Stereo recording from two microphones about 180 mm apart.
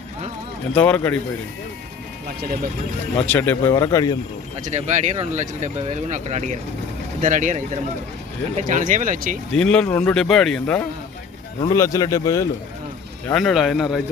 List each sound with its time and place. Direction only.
0.7 s speech: 5° left (ahead or behind)
3.2 s speech: 10° left (ahead or behind)
4.6 s speech: 40° right (ahead or behind)
9.6 s a man's voice: 5° left (ahead or behind)
11.7 s speech: 15° left (ahead or behind)
13.2 s a man's voice: centre (ahead or behind)